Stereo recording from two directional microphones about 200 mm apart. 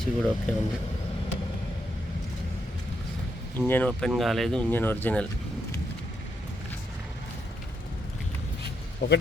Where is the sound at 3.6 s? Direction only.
10° left (ahead or behind).